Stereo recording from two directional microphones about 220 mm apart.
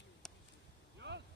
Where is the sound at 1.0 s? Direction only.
50° right (ahead or behind).